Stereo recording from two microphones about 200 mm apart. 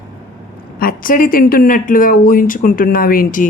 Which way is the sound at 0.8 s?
45° left (ahead or behind).